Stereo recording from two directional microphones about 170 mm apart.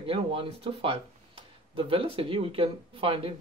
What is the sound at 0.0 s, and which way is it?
Speech, 30° right (ahead or behind).